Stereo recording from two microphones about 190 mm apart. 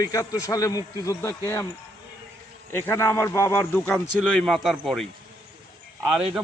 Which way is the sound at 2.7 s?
15° left (ahead or behind).